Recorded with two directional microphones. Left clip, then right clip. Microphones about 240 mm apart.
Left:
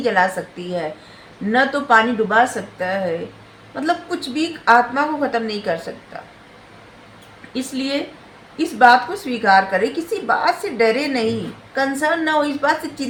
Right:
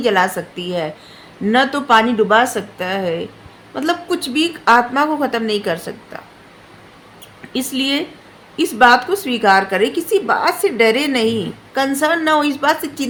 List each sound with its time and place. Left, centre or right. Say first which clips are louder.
0.0 s a woman's voice: right 2 dB; right
1.5 s a woman's voice: right 1 dB; right
7.5 s a woman's voice: right 4 dB; right